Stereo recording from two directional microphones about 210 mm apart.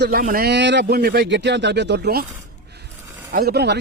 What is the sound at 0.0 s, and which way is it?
Speech, 40° right (ahead or behind).